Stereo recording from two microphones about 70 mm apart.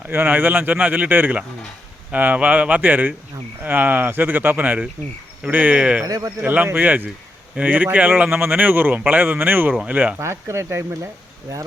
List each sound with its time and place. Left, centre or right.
0.1 s a man's voice: right
6.1 s speech: right
6.4 s a man's voice: right
10.2 s speech: right